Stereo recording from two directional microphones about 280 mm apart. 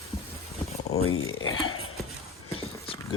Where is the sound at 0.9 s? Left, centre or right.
Left.